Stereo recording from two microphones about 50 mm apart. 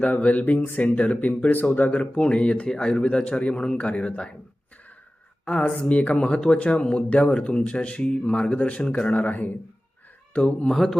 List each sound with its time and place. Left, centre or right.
0.0 s a man's voice: left
2.1 s a man's voice: left
5.6 s a man's voice: left
10.7 s speech: centre